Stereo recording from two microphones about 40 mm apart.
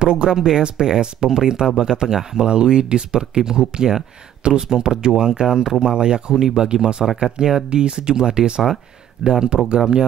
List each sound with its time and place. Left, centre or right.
0.0 s speech: right